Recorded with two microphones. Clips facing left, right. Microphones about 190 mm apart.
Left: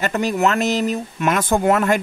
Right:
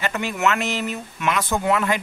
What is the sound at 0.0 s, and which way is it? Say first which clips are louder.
Speech: left 4 dB; 40° left (ahead or behind).